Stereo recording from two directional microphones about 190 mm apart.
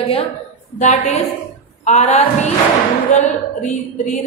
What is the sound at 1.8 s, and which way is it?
Speech, 35° left (ahead or behind).